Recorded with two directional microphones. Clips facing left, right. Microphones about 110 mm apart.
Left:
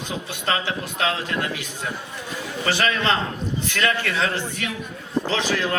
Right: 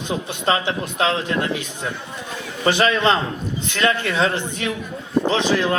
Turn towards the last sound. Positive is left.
turn(degrees=-20)  # may be behind; listen again after turning